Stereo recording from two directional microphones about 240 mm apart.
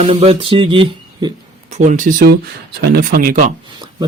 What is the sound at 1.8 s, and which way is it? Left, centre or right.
Speech, right.